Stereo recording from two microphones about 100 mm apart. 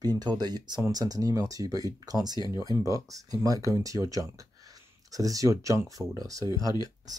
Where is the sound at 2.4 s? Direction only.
40° left (ahead or behind).